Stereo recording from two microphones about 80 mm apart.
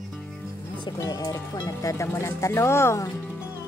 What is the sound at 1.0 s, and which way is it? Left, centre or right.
Speech, left.